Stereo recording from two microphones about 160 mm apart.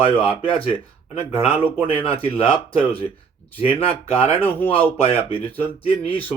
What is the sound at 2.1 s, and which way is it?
Speech, 35° left (ahead or behind).